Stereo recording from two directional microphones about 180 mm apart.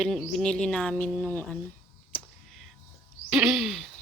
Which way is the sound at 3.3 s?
5° right (ahead or behind).